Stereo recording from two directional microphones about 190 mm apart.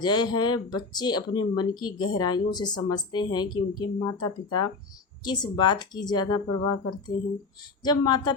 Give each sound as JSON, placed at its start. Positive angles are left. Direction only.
{"t": 0.0, "sound": "speech", "side_deg": 20}
{"t": 7.9, "sound": "speech", "side_deg": 20}